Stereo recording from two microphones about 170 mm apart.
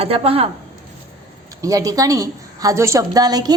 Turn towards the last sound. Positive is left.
turn(degrees=-25)  # may be behind; listen again after turning